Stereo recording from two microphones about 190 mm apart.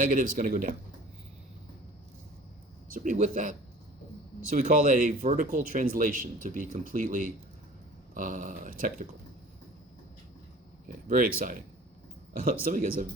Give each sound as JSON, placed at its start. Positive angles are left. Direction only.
{"t": 0.0, "sound": "speech", "side_deg": -45}
{"t": 2.9, "sound": "speech", "side_deg": -40}
{"t": 10.8, "sound": "speech", "side_deg": -45}